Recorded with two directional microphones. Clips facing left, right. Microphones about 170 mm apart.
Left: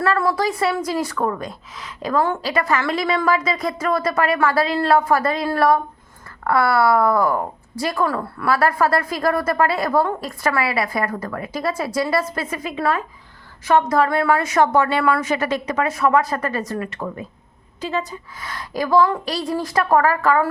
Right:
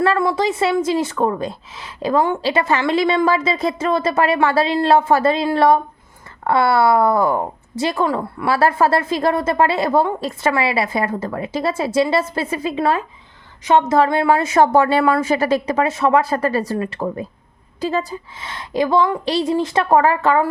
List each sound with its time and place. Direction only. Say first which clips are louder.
0.2 s a woman's voice: right 2 dB; 20° right (ahead or behind); by 18.2 s 35° right (ahead or behind)
18.3 s a woman's voice: right 5 dB; 25° right (ahead or behind)